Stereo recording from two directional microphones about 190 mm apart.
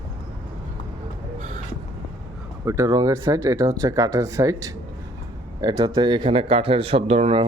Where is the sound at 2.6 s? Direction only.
15° right (ahead or behind); by 7.5 s 30° right (ahead or behind).